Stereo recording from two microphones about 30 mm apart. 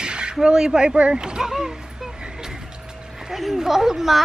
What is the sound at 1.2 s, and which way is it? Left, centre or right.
Speech, right.